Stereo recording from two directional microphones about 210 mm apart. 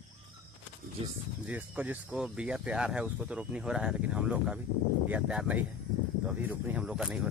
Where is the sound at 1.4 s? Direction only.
5° right (ahead or behind).